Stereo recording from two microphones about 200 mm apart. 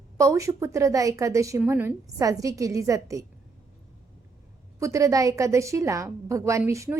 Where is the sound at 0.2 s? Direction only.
15° right (ahead or behind).